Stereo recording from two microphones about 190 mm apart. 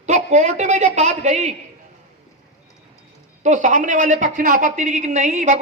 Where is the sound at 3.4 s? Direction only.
40° right (ahead or behind).